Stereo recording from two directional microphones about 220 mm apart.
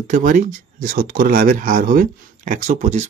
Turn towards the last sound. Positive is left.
turn(degrees=-35)  # may be behind; listen again after turning